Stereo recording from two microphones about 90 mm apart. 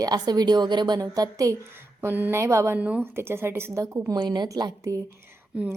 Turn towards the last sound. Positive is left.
turn(degrees=-15)  # may be behind; listen again after turning